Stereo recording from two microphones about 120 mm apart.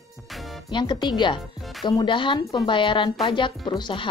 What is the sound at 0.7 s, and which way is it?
A woman's voice, 40° left (ahead or behind).